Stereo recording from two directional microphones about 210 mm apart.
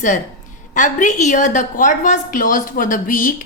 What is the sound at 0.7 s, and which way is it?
A woman's voice, 35° left (ahead or behind).